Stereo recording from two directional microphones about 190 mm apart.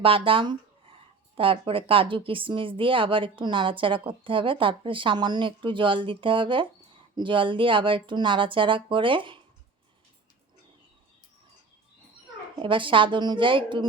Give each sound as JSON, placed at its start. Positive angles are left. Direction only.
{"t": 0.0, "sound": "speech", "side_deg": -30}
{"t": 12.5, "sound": "speech", "side_deg": -25}